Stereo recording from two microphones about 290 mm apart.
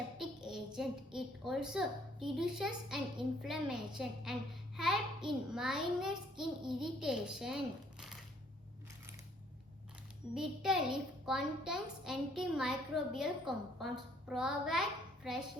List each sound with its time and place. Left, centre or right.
0.2 s a sound: centre
2.3 s a child's voice: centre
10.3 s a child's voice: centre